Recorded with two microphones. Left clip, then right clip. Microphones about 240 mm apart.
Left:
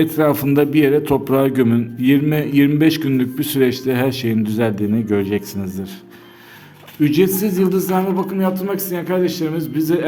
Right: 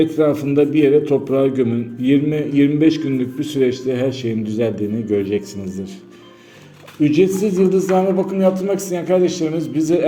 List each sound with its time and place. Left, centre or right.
0.0 s a man's voice: left
7.0 s speech: left